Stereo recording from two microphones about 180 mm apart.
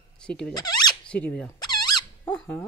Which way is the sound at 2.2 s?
5° left (ahead or behind).